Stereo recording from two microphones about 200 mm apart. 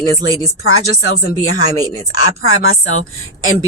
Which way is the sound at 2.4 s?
90° left.